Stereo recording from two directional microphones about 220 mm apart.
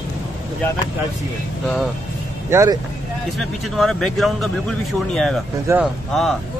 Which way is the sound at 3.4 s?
Centre (ahead or behind).